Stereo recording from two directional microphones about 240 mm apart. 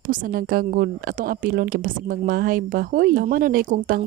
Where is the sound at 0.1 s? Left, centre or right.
Right.